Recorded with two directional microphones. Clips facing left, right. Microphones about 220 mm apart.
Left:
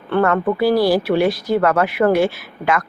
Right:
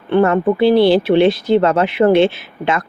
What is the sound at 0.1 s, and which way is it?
Speech, 20° right (ahead or behind).